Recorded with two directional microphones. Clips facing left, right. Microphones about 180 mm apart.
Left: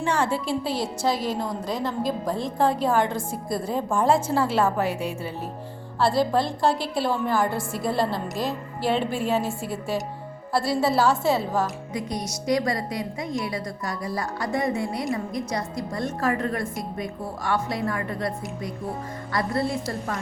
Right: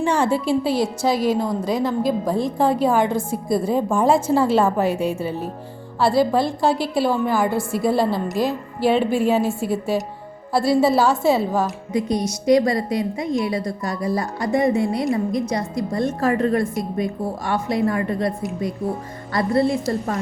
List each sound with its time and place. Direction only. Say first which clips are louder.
0.0 s a woman's voice: right 5 dB; 15° right (ahead or behind)
6.0 s a woman's voice: right 4 dB; 5° right (ahead or behind)
11.9 s a woman's voice: right 10 dB; 25° right (ahead or behind)